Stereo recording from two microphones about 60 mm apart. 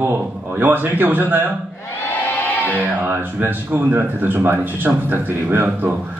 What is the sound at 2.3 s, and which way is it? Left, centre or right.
Music, left.